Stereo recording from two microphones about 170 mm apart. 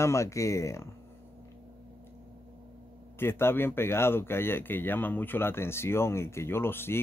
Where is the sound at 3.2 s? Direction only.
15° left (ahead or behind).